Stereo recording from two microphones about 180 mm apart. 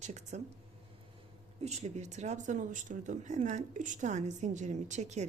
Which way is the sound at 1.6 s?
40° right (ahead or behind).